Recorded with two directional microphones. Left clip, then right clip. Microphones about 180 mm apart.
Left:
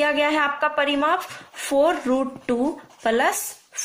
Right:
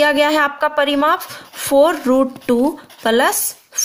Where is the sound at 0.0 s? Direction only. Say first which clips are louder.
Right 6 dB; 45° right (ahead or behind).